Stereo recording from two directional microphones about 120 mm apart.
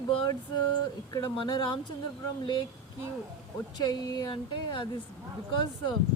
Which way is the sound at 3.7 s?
35° left (ahead or behind).